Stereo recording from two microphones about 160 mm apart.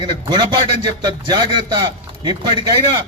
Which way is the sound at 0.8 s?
25° right (ahead or behind).